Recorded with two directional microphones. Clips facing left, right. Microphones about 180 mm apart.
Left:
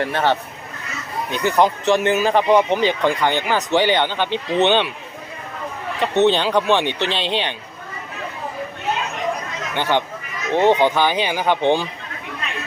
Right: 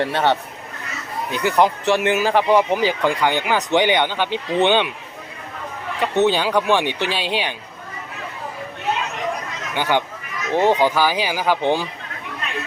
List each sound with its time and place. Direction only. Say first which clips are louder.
0.0 s speech: even; 20° right (ahead or behind)
1.5 s speech: left 1 dB; 10° right (ahead or behind)
6.0 s speech: left 1 dB; 10° right (ahead or behind)
9.7 s speech: even; 10° right (ahead or behind)